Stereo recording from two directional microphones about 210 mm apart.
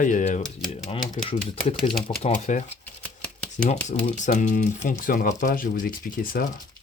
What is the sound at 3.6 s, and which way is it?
Speech, 35° left (ahead or behind).